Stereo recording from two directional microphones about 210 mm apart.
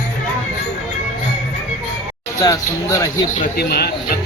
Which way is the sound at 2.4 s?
15° left (ahead or behind).